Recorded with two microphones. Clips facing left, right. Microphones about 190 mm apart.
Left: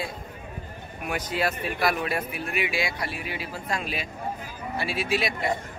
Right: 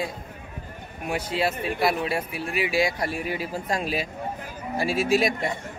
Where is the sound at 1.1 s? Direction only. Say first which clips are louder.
Right 2 dB; 30° right (ahead or behind); by 5.4 s 45° right (ahead or behind).